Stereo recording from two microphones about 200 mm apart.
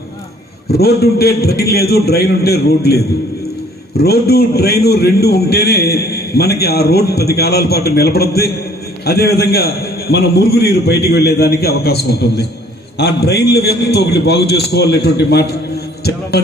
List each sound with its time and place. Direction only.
0.7 s a man's voice: 50° left (ahead or behind)